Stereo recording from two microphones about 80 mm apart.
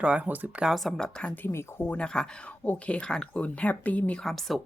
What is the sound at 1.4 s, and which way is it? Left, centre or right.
Speech, left.